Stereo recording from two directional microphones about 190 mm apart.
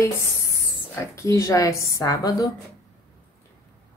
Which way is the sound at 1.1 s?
15° left (ahead or behind).